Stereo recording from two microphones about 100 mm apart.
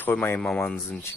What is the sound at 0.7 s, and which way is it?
Speech, 25° left (ahead or behind).